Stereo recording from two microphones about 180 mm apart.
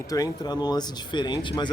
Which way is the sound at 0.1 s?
20° left (ahead or behind).